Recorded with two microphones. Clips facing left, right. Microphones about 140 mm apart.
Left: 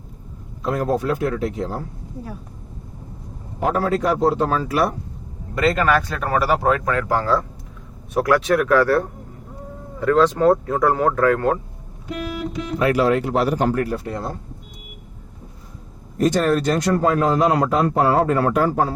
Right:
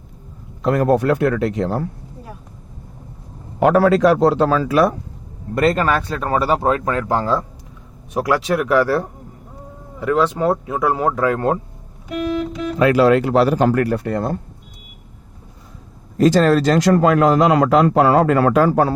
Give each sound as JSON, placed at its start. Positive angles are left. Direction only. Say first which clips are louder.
{"t": 0.6, "sound": "a man's voice", "louder": "right 5 dB", "side_deg": -70}
{"t": 3.6, "sound": "a man's voice", "louder": "right 7 dB", "side_deg": -80}
{"t": 5.5, "sound": "a man's voice", "louder": "right 3 dB", "side_deg": -45}
{"t": 5.8, "sound": "speech", "louder": "even", "side_deg": -30}
{"t": 10.0, "sound": "speech", "louder": "left 2 dB", "side_deg": -15}
{"t": 12.8, "sound": "a man's voice", "louder": "right 5 dB", "side_deg": -90}
{"t": 16.1, "sound": "a man's voice", "louder": "right 4 dB", "side_deg": -90}